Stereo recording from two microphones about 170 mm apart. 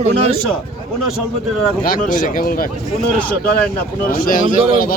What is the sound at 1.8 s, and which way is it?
Speech, 55° left (ahead or behind).